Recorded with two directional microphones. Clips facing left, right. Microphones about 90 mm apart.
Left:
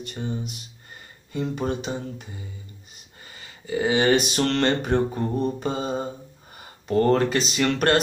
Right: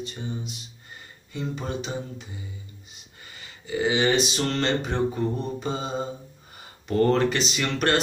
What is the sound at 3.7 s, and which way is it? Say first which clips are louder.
Speech: left 3 dB; 40° left (ahead or behind).